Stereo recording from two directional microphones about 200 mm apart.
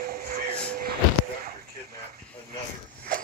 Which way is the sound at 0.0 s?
50° right (ahead or behind).